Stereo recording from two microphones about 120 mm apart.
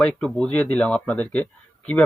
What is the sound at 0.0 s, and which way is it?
Speech, 5° left (ahead or behind).